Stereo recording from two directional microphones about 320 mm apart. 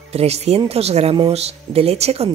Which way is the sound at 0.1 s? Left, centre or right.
Centre.